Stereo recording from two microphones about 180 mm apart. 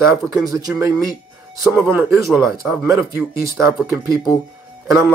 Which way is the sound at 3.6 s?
15° right (ahead or behind).